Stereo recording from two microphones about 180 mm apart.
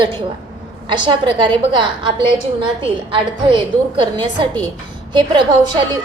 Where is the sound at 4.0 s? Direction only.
25° right (ahead or behind).